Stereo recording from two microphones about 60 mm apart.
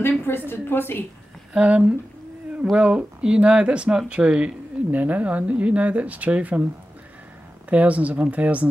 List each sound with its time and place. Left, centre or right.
0.0 s a woman's voice: left
1.5 s speech: right
7.7 s speech: right